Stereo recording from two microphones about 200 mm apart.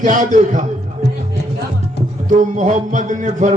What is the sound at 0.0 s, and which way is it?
Music, 40° right (ahead or behind).